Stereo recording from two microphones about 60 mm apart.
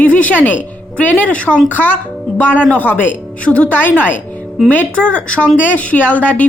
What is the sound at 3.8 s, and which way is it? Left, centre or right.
Speech, left.